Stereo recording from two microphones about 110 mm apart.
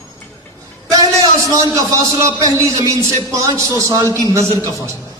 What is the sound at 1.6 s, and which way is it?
A man's voice, 30° right (ahead or behind).